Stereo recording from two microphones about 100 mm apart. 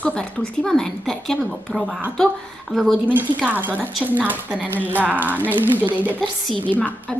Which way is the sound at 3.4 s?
20° right (ahead or behind).